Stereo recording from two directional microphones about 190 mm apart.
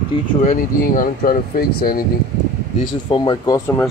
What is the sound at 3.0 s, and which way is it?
Speech, 25° left (ahead or behind).